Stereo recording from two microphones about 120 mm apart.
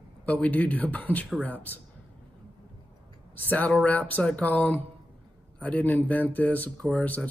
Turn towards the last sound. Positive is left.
turn(degrees=10)  # may be behind; listen again after turning